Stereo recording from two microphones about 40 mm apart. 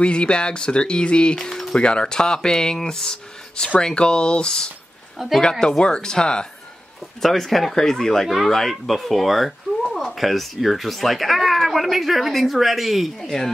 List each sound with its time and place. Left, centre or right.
0.0 s speech: left
7.2 s speech: centre
13.2 s speech: centre